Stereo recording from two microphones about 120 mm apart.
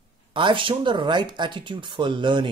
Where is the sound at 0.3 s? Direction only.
45° right (ahead or behind).